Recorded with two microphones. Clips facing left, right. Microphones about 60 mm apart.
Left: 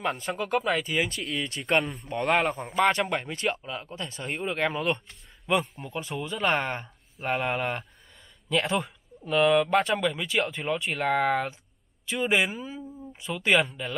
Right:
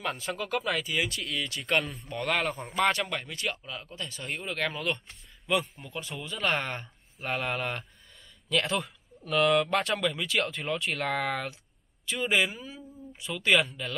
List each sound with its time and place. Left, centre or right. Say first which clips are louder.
0.4 s speech: left 5 dB; left
13.1 s speech: left 1 dB; centre